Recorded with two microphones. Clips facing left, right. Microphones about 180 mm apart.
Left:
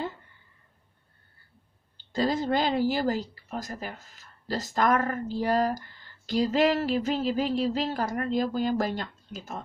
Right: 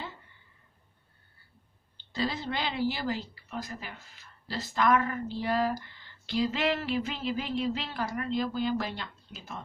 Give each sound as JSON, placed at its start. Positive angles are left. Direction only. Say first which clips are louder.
{"t": 2.1, "sound": "a woman's voice", "louder": "left 7 dB", "side_deg": 45}